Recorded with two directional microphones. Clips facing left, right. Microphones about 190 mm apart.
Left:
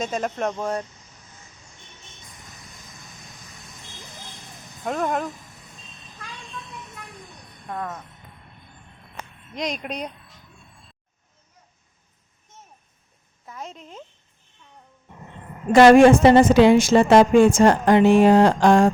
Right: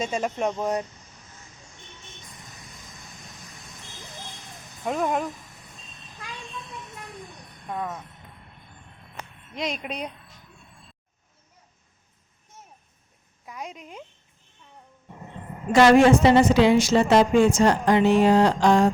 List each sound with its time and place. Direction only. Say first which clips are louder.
0.0 s speech: even; 5° right (ahead or behind)
0.6 s speech: right 1 dB; 15° right (ahead or behind)
4.8 s speech: even; 5° right (ahead or behind)
7.7 s speech: even; 5° right (ahead or behind)
9.6 s speech: left 2 dB; 5° right (ahead or behind)
13.4 s a sound: even; 15° right (ahead or behind)
15.7 s a woman's voice: left 4 dB; 50° left (ahead or behind)